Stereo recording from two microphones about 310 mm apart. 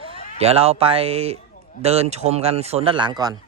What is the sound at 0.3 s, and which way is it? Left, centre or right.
Speech, centre.